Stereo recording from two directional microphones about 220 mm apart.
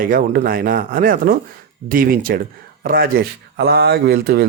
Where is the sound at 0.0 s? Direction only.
40° right (ahead or behind).